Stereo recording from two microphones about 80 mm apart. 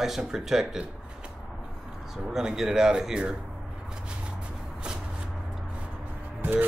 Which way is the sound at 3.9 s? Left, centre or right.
Centre.